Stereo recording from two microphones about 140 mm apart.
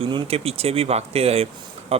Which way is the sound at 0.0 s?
40° right (ahead or behind).